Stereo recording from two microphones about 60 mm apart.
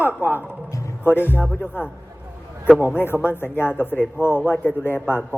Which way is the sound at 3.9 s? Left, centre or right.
Left.